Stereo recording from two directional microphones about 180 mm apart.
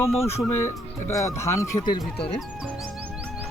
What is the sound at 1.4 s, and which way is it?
Speech, 15° left (ahead or behind).